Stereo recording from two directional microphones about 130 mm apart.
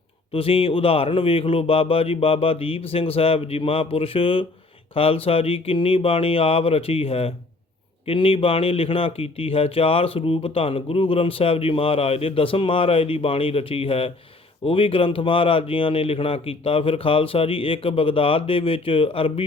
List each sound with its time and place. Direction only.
0.3 s speech: 45° left (ahead or behind)